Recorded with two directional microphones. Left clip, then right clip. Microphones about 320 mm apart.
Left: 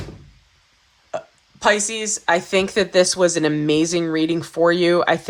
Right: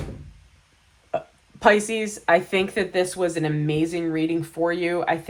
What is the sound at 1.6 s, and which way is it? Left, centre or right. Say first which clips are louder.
Speech: even; centre.